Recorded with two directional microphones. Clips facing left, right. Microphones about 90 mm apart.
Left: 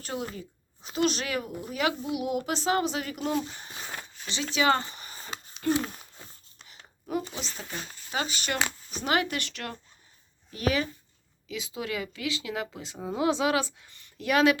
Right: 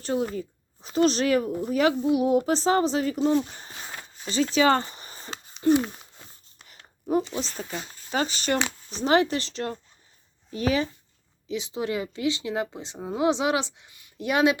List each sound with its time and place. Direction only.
0.0 s a woman's voice: 35° right (ahead or behind)
5.6 s speech: 20° right (ahead or behind)
7.3 s a woman's voice: 35° right (ahead or behind)